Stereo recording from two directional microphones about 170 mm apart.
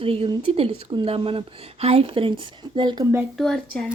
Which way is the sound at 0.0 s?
35° right (ahead or behind).